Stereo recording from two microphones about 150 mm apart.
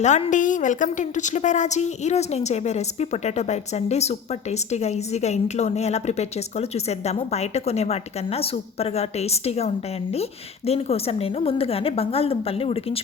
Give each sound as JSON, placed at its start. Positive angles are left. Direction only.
{"t": 0.0, "sound": "a woman's voice", "side_deg": 50}